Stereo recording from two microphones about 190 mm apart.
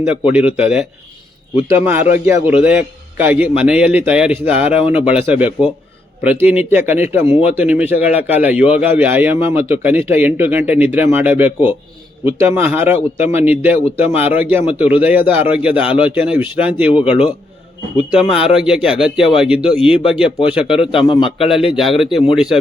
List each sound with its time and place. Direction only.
0.1 s a man's voice: 5° right (ahead or behind)
18.1 s a man's voice: 5° right (ahead or behind)
20.7 s a man's voice: 30° left (ahead or behind)
21.5 s a man's voice: centre (ahead or behind)